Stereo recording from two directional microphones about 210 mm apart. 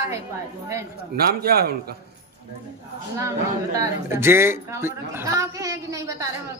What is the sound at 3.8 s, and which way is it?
A woman's voice, 10° right (ahead or behind).